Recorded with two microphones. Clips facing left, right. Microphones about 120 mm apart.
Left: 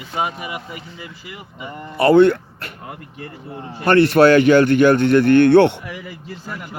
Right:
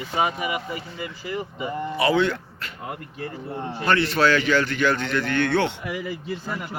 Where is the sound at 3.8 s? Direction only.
55° left (ahead or behind).